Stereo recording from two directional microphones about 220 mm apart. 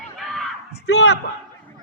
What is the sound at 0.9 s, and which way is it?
Speech, 50° left (ahead or behind).